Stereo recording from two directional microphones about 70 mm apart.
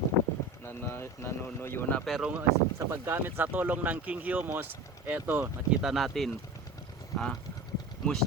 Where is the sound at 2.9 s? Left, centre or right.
Right.